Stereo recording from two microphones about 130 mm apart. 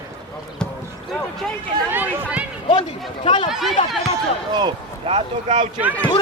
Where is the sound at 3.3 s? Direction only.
40° left (ahead or behind).